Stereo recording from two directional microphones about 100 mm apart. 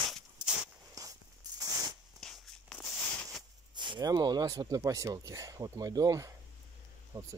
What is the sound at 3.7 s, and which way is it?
Speech, 50° right (ahead or behind).